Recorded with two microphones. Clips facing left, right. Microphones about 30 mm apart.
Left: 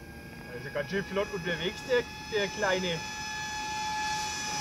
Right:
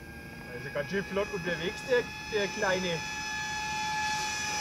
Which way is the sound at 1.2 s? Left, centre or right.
Left.